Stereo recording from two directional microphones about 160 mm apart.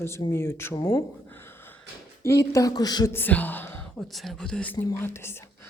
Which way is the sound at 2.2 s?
20° left (ahead or behind).